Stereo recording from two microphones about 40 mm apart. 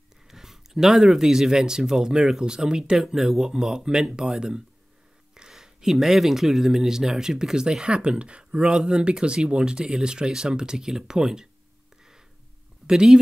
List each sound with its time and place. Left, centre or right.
0.3 s speech: centre
12.8 s speech: centre